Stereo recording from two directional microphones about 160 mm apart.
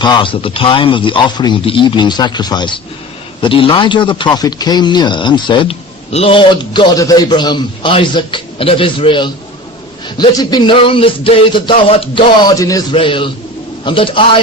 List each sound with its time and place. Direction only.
0.0 s a man's voice: 30° left (ahead or behind)
12.9 s speech: 35° left (ahead or behind)